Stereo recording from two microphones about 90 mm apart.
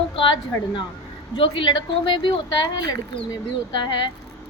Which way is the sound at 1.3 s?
75° left (ahead or behind).